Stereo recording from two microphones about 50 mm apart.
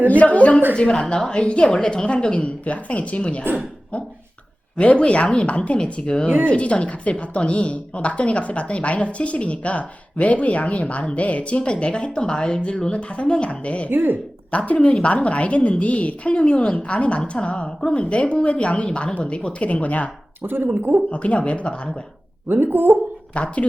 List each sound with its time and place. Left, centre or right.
0.1 s a woman's voice: left
0.8 s a woman's voice: centre
13.9 s speech: right
14.5 s a woman's voice: left
20.4 s speech: right
21.1 s a woman's voice: left
22.4 s speech: right
23.3 s a woman's voice: left